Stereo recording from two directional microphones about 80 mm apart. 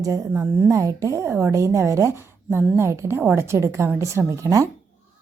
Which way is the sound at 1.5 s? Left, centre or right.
Right.